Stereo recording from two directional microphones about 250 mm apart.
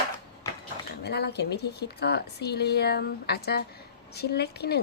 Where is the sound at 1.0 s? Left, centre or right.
Left.